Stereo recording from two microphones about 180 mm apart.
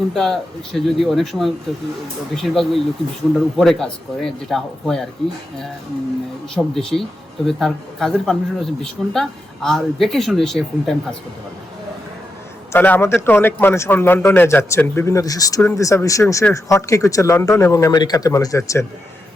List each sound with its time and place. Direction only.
0.1 s speech: centre (ahead or behind)
6.5 s speech: centre (ahead or behind)
12.7 s a man's voice: 10° left (ahead or behind)